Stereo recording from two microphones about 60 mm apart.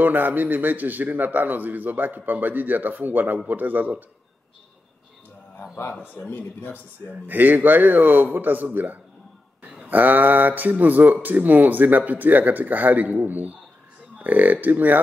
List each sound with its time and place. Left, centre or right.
0.0 s a man's voice: right
5.9 s speech: left
7.1 s speech: right